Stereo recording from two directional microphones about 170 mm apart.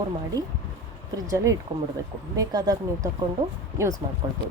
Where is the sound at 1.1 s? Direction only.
20° right (ahead or behind).